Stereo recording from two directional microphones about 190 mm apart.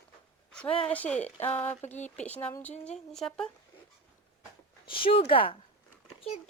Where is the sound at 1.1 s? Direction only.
35° left (ahead or behind).